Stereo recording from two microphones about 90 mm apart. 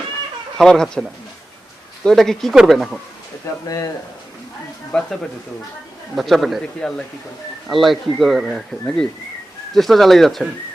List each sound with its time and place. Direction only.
0.5 s speech: 5° left (ahead or behind)
2.0 s speech: 5° left (ahead or behind)
3.7 s speech: 40° left (ahead or behind)
4.9 s speech: 10° left (ahead or behind)
6.1 s speech: centre (ahead or behind)